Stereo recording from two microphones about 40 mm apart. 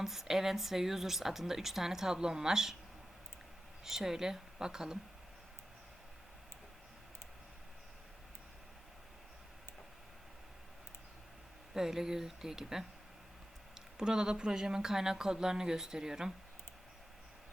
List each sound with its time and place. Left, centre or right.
0.0 s a woman's voice: centre
3.8 s a woman's voice: centre
11.7 s a woman's voice: centre